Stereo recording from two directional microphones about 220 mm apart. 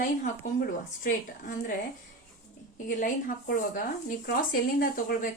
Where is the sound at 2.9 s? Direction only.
40° left (ahead or behind).